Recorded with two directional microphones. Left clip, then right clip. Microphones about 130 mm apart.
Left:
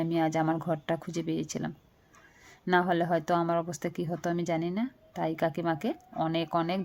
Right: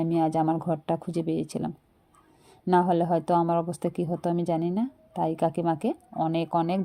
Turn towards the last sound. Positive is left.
turn(degrees=-25)  # may be behind; listen again after turning